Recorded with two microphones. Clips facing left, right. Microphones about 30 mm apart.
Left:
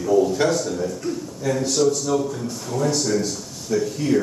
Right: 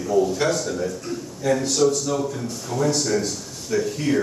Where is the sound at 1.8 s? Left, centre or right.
Centre.